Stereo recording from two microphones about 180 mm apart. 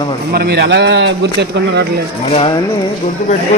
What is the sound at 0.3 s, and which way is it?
A man's voice, 65° right (ahead or behind).